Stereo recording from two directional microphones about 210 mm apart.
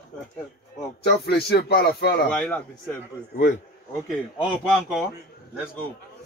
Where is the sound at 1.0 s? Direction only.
50° left (ahead or behind).